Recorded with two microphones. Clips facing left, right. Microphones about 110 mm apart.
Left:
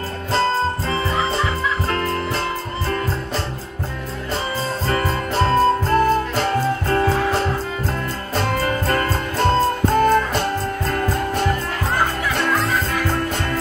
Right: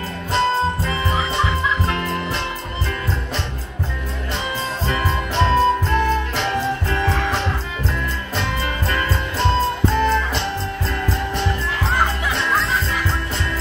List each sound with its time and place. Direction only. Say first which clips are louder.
0.3 s music: even; 35° left (ahead or behind)
4.8 s music: left 1 dB; 40° left (ahead or behind)
8.4 s music: left 5 dB; 45° left (ahead or behind)